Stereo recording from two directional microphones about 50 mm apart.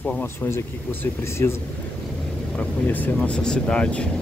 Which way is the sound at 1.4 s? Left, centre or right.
Left.